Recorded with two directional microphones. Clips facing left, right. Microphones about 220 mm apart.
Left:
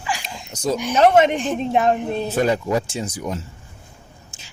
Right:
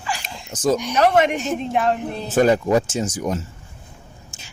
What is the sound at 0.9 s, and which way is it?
A woman's voice, 25° left (ahead or behind).